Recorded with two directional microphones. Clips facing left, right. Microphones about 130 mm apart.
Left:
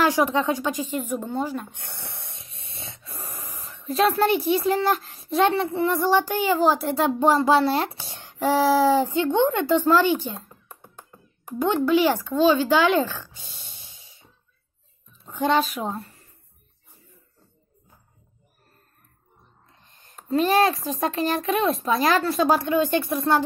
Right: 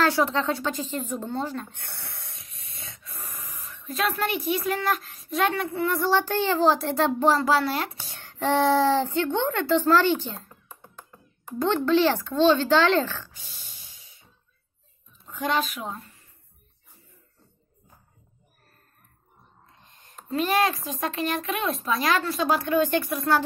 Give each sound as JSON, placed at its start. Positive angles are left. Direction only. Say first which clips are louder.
{"t": 0.0, "sound": "a woman's voice", "louder": "left 2 dB", "side_deg": 15}
{"t": 15.2, "sound": "speech", "louder": "left 5 dB", "side_deg": 30}
{"t": 19.8, "sound": "a child's voice", "louder": "even", "side_deg": 35}
{"t": 22.6, "sound": "speech", "louder": "left 1 dB", "side_deg": 20}